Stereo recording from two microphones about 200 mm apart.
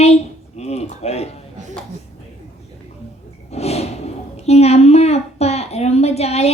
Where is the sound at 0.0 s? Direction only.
30° left (ahead or behind).